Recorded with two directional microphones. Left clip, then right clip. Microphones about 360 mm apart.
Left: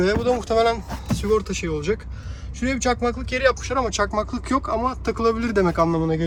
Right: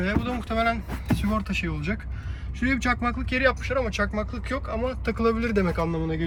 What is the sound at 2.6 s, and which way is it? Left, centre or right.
Speech, centre.